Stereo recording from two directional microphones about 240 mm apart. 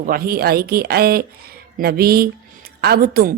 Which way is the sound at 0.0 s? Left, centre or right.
Right.